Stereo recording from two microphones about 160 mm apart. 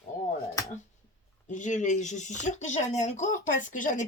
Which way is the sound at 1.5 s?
50° left (ahead or behind).